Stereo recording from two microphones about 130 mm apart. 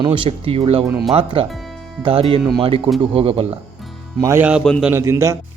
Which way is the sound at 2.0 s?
45° right (ahead or behind).